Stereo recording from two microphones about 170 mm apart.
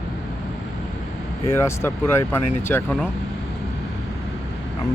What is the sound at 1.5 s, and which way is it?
Speech, 15° left (ahead or behind).